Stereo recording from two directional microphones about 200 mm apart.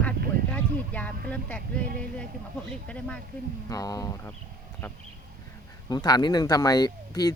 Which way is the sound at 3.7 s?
15° left (ahead or behind).